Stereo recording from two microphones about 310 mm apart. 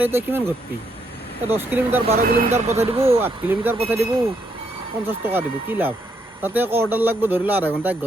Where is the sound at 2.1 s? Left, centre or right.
Right.